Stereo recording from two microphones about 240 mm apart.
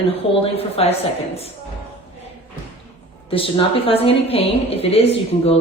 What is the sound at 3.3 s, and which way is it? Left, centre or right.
A woman's voice, left.